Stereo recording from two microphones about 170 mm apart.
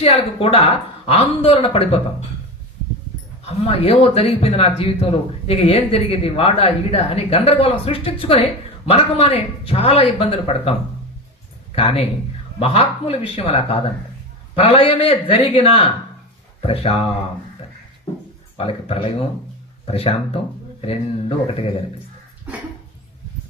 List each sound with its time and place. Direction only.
0.0 s speech: 35° left (ahead or behind)
3.4 s speech: 35° left (ahead or behind)
18.5 s speech: 35° left (ahead or behind)